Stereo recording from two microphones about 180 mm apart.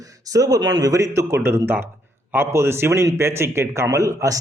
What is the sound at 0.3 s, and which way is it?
Speech, 20° right (ahead or behind).